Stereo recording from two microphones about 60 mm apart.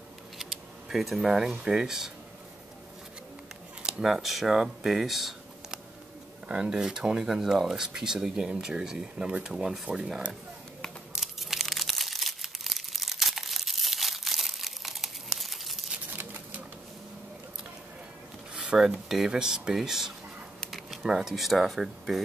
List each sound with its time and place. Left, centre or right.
0.4 s speech: centre
3.8 s speech: centre
6.4 s speech: centre
11.1 s crumpling: centre
16.1 s a sound: right
18.5 s speech: centre